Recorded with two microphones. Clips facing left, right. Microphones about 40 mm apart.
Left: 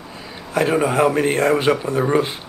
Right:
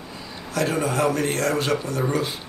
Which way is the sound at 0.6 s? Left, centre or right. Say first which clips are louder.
Left 6 dB; left.